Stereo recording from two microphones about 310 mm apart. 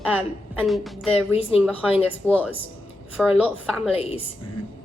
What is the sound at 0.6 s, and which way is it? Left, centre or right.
A woman's voice, centre.